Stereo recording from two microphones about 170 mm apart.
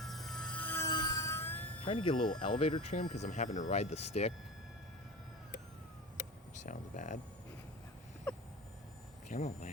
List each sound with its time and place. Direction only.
0.0 s music: centre (ahead or behind)
0.9 s bicycle bell: 25° left (ahead or behind)
1.8 s speech: 30° left (ahead or behind)
6.5 s speech: 45° left (ahead or behind)
9.3 s speech: 45° left (ahead or behind)